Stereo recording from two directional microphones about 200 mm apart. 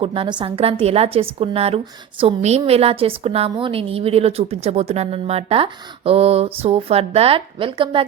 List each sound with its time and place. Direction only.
0.0 s a woman's voice: 25° right (ahead or behind)